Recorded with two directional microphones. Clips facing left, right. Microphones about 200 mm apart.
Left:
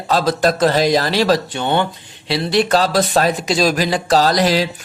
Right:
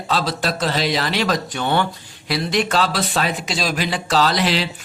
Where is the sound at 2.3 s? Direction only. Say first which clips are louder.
Left 5 dB; 35° left (ahead or behind).